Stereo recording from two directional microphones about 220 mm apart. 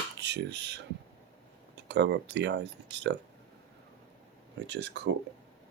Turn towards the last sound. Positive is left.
turn(degrees=-55)  # may be behind; listen again after turning